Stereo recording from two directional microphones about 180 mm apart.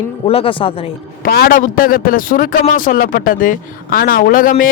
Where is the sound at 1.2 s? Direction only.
60° left (ahead or behind).